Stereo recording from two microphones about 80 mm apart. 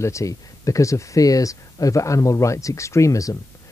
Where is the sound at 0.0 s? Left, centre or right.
Left.